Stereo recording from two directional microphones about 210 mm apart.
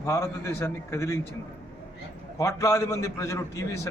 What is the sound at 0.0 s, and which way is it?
A man's voice, 15° left (ahead or behind).